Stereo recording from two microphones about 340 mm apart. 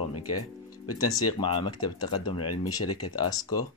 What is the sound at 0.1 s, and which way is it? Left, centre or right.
Speech, left.